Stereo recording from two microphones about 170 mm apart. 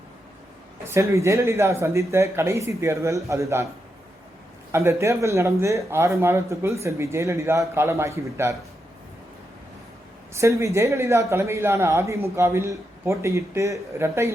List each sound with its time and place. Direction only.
0.9 s a man's voice: 15° right (ahead or behind)
4.7 s a man's voice: 15° right (ahead or behind)
10.3 s a man's voice: 15° right (ahead or behind)